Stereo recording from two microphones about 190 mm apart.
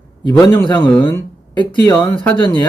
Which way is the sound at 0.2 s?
20° left (ahead or behind).